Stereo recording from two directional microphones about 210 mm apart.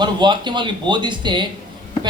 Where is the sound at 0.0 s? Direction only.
20° right (ahead or behind).